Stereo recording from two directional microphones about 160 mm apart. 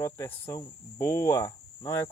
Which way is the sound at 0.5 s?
20° left (ahead or behind).